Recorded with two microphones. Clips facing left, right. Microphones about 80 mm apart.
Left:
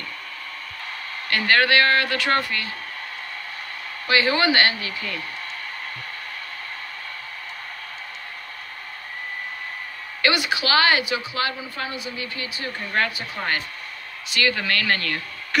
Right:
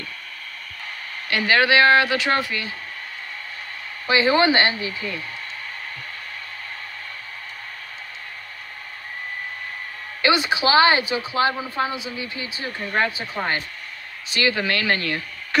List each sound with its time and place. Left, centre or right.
1.3 s speech: centre
4.1 s a woman's voice: right
10.2 s a woman's voice: right